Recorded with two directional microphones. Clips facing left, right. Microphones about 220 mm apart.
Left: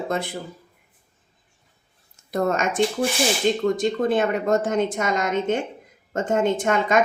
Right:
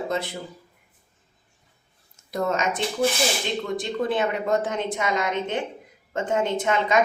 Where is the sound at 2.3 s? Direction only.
50° left (ahead or behind).